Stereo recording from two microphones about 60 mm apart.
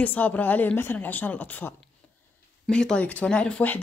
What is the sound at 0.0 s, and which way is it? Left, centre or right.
A woman's voice, left.